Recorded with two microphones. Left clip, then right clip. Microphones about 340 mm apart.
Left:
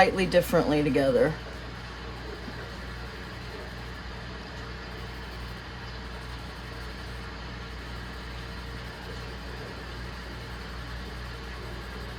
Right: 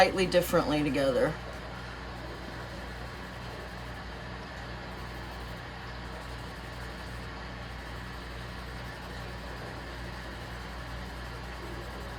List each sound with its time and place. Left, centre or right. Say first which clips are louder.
0.0 s a woman's voice: left 2 dB; centre